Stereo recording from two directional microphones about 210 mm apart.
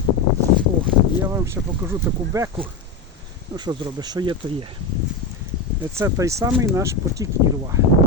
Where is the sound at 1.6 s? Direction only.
10° right (ahead or behind).